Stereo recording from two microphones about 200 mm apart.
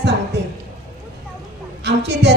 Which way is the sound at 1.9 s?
60° right (ahead or behind).